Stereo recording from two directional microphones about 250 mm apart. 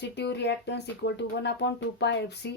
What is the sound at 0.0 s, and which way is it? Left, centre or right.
Speech, left.